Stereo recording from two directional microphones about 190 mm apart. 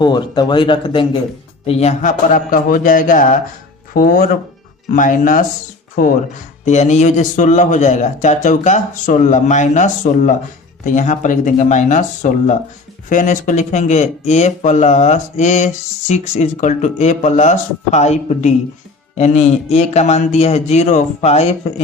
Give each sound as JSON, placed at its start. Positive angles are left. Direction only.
{"t": 0.0, "sound": "a man's voice", "side_deg": 20}
{"t": 6.7, "sound": "speech", "side_deg": 35}